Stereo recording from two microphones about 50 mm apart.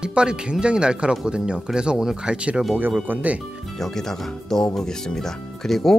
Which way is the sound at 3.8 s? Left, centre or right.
Centre.